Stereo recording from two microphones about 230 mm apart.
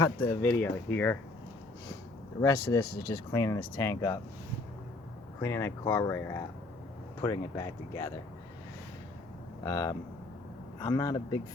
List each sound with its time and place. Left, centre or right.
0.0 s speech: centre
2.4 s speech: centre
5.4 s speech: centre
9.6 s speech: centre